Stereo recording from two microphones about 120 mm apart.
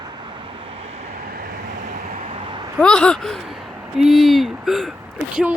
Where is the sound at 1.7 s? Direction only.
90° right.